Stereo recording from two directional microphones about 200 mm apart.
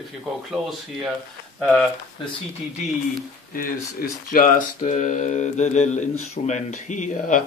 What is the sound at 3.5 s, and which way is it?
Speech, 45° left (ahead or behind).